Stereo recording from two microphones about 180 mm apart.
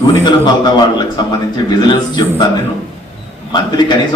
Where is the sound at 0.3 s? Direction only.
25° left (ahead or behind).